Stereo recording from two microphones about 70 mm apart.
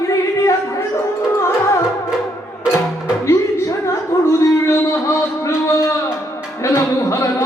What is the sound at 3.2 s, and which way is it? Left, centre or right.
Music, left.